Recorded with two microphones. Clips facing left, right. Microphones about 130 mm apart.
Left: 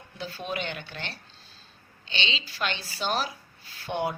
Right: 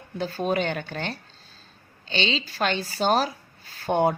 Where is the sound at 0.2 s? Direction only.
45° right (ahead or behind).